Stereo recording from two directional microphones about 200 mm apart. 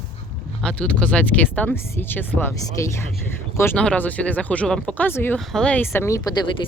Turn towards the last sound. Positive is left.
turn(degrees=15)  # may be behind; listen again after turning